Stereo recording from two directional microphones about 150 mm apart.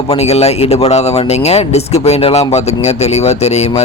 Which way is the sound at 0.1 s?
45° left (ahead or behind).